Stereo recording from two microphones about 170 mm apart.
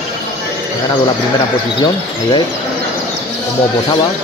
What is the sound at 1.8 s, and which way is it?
Speech, 30° left (ahead or behind).